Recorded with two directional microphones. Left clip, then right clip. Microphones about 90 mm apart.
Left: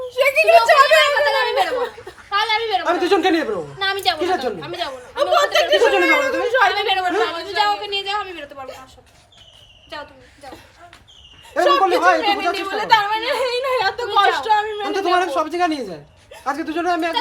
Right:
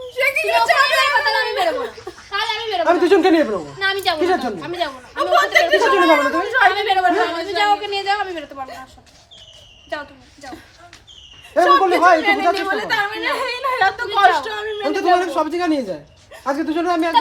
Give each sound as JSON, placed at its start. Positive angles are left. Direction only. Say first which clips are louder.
{"t": 0.2, "sound": "a sound", "louder": "left 4 dB", "side_deg": -20}
{"t": 2.3, "sound": "a woman's voice", "louder": "left 3 dB", "side_deg": -25}
{"t": 11.5, "sound": "a woman's voice", "louder": "right 2 dB", "side_deg": -25}